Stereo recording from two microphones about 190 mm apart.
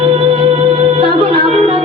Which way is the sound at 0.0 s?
30° right (ahead or behind).